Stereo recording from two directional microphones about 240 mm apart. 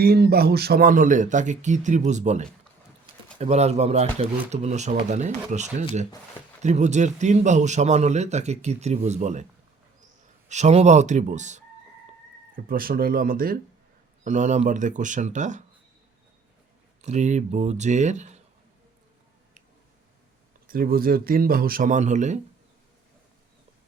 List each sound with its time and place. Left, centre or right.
0.0 s a man's voice: right
10.5 s a man's voice: right
17.0 s a man's voice: right
20.7 s speech: right